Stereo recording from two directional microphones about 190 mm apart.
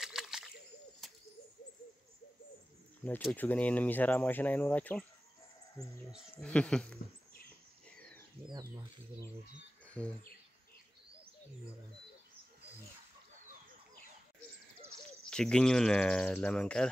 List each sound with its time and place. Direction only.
0.0 s a sound: centre (ahead or behind)
3.0 s speech: 10° left (ahead or behind)
6.3 s speech: 5° left (ahead or behind)
8.4 s speech: 30° right (ahead or behind)
10.0 s speech: 5° left (ahead or behind)
15.2 s speech: 5° left (ahead or behind)